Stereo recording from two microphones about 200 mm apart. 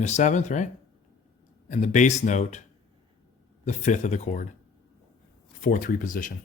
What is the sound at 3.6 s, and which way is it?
Speech, 35° left (ahead or behind).